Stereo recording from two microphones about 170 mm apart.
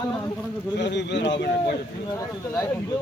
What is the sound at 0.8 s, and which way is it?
Speech, 90° left.